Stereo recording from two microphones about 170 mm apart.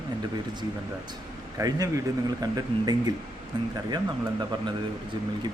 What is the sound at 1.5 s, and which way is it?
Speech, 20° right (ahead or behind).